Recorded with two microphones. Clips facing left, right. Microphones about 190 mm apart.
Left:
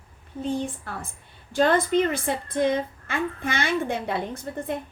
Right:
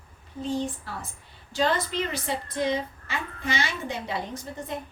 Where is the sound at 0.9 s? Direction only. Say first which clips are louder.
Left 2 dB; 55° left (ahead or behind).